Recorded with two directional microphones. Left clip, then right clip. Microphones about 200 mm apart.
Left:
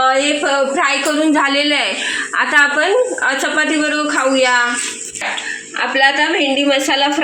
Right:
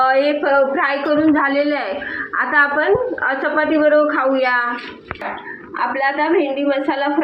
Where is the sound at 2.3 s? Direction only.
65° left (ahead or behind).